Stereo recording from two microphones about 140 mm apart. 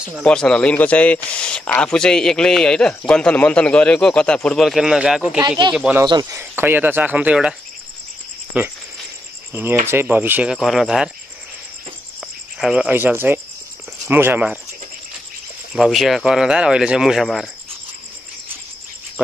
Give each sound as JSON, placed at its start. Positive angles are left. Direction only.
{"t": 0.2, "sound": "speech", "side_deg": 5}
{"t": 8.5, "sound": "speech", "side_deg": -10}
{"t": 12.5, "sound": "speech", "side_deg": -5}
{"t": 15.7, "sound": "speech", "side_deg": 0}